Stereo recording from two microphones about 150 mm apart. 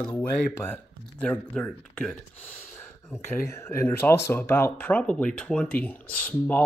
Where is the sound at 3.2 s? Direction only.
15° left (ahead or behind).